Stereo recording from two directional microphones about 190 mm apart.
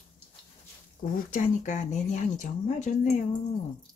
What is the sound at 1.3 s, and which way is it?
Speech, 40° left (ahead or behind).